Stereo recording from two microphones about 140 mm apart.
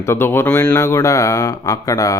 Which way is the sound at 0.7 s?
20° left (ahead or behind).